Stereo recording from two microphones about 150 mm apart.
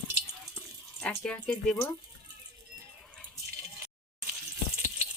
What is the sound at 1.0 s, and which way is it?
Speech, 5° left (ahead or behind).